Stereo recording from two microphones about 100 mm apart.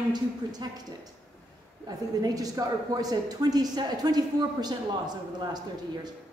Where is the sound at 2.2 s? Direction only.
40° right (ahead or behind).